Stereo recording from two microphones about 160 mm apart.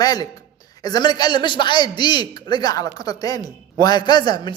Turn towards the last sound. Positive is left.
turn(degrees=25)  # may be behind; listen again after turning